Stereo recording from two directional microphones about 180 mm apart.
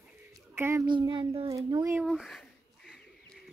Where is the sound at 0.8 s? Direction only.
25° right (ahead or behind).